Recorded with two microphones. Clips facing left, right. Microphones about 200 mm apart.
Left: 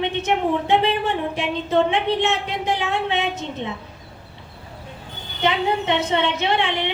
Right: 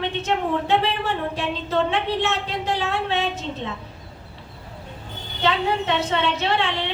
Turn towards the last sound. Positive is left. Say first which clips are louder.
# left 2 dB
turn(degrees=15)  # may be behind; listen again after turning